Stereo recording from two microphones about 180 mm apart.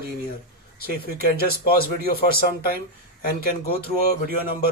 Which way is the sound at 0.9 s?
60° left (ahead or behind).